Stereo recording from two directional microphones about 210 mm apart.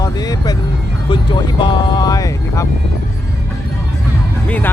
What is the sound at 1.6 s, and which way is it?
Speech, 20° left (ahead or behind).